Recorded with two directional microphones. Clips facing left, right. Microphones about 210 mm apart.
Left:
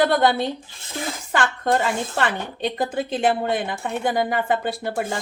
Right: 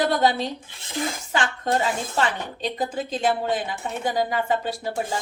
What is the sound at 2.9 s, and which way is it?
A woman's voice, 60° left (ahead or behind).